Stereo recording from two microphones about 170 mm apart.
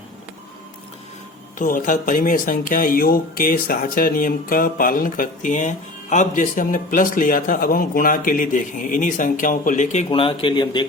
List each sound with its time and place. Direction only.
1.5 s speech: 50° left (ahead or behind)
10.1 s speech: 30° left (ahead or behind)